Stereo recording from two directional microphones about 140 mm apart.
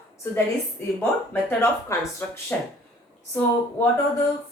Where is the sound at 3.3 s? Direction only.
15° left (ahead or behind).